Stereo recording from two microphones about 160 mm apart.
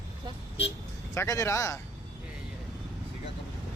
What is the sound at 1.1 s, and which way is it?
Speech, 20° left (ahead or behind).